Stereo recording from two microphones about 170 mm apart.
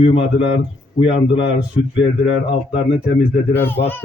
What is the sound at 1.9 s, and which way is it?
Speech, 90° left.